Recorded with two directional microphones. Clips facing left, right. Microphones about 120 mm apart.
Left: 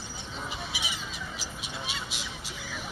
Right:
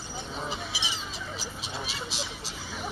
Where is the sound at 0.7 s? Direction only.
35° right (ahead or behind).